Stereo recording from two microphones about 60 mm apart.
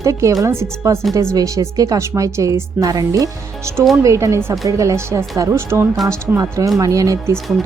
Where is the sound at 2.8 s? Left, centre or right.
Right.